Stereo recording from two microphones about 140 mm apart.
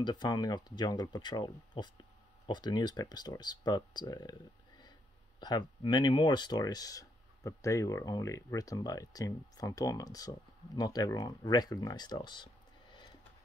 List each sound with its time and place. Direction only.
0.0 s speech: 30° left (ahead or behind)